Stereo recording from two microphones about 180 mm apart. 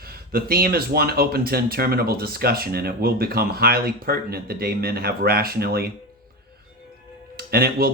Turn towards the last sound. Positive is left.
turn(degrees=-60)  # may be behind; listen again after turning